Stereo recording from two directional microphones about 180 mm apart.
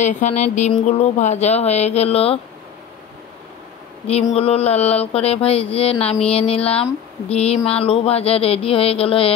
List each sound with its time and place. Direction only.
0.0 s mantra: 40° left (ahead or behind)
4.1 s mantra: 35° left (ahead or behind)